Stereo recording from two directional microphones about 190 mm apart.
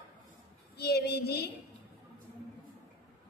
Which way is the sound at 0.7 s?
55° left (ahead or behind).